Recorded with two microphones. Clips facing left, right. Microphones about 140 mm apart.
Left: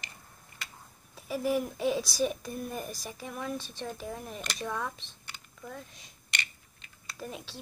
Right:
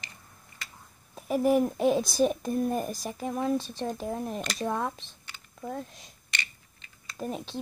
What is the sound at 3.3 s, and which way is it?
Speech, 30° right (ahead or behind).